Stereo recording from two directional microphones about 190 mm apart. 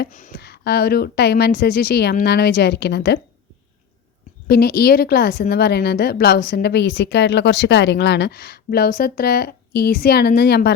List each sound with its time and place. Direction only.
0.0 s a woman's voice: 50° left (ahead or behind)
4.4 s a woman's voice: 55° left (ahead or behind)